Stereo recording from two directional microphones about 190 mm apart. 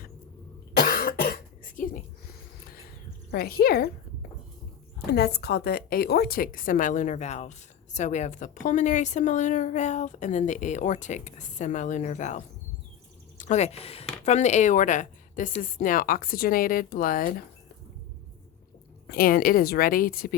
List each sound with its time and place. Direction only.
0.8 s cough: 50° left (ahead or behind)
3.3 s a woman's voice: 55° left (ahead or behind)
5.1 s a woman's voice: 55° left (ahead or behind); by 12.4 s 40° left (ahead or behind)
13.4 s a woman's voice: 35° left (ahead or behind)
19.0 s a woman's voice: 50° left (ahead or behind)